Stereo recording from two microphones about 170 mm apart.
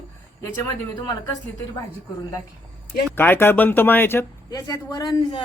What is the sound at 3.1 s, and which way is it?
Speech, 10° left (ahead or behind).